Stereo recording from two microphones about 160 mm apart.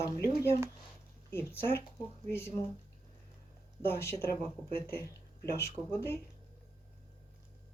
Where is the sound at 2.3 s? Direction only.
15° left (ahead or behind).